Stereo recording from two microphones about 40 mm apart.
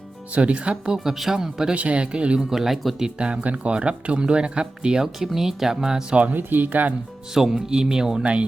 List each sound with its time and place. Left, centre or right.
0.3 s speech: right
0.9 s speech: centre
1.7 s speech: right
2.5 s speech: centre
3.2 s speech: right
6.3 s speech: right
7.3 s speech: centre
8.2 s speech: right